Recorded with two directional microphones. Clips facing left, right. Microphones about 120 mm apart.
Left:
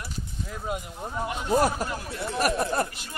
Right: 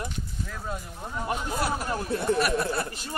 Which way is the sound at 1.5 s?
40° left (ahead or behind).